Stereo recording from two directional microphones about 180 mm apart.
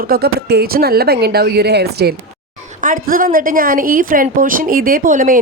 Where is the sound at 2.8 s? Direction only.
50° right (ahead or behind).